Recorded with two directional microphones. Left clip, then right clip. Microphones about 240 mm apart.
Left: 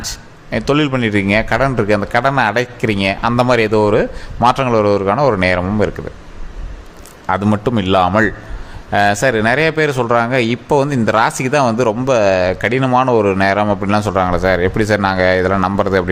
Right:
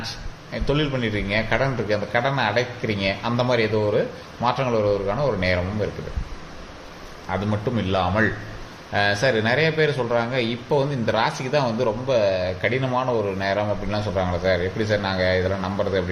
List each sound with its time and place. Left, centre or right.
0.5 s speech: left
7.3 s speech: left